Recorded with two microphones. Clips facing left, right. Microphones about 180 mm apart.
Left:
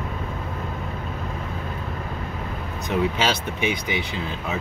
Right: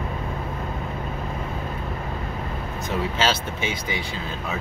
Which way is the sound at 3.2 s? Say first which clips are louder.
Left 1 dB; 15° left (ahead or behind).